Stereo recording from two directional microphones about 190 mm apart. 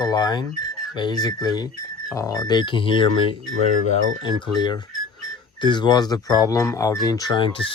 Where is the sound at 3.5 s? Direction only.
90° right.